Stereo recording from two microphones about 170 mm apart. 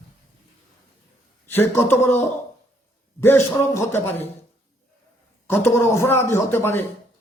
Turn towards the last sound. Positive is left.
turn(degrees=15)  # may be behind; listen again after turning